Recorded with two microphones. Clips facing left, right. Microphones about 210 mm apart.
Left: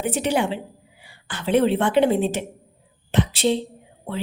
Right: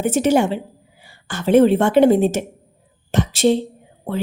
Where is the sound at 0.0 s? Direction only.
45° right (ahead or behind).